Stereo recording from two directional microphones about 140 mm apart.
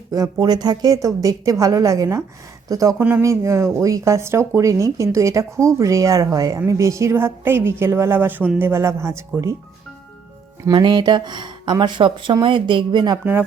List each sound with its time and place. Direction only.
0.1 s speech: 25° right (ahead or behind)
10.7 s speech: 35° right (ahead or behind)